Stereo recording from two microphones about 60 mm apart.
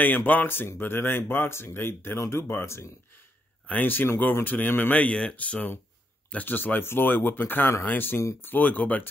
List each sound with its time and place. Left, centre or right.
0.0 s speech: left
3.6 s speech: left